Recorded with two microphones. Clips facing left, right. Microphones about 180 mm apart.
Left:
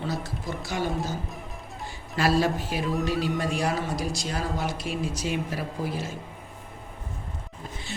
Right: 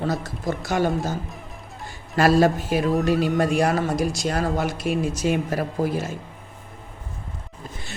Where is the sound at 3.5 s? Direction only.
55° right (ahead or behind).